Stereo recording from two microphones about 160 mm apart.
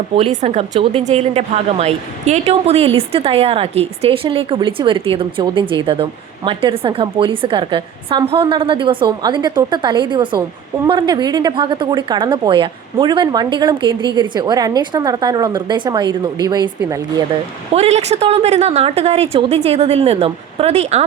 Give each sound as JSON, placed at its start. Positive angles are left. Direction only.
{"t": 0.2, "sound": "a woman's voice", "side_deg": -45}
{"t": 17.7, "sound": "a woman's voice", "side_deg": -45}